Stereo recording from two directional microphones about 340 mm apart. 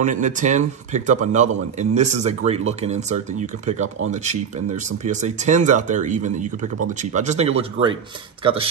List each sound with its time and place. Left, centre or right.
0.0 s a man's voice: right